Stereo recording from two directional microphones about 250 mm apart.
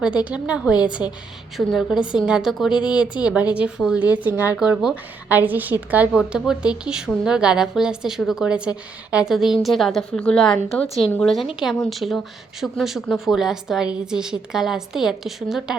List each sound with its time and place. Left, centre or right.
0.3 s speech: centre
2.7 s a woman's voice: centre
3.2 s speech: centre